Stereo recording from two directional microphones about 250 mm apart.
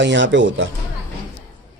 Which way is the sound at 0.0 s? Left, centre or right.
Right.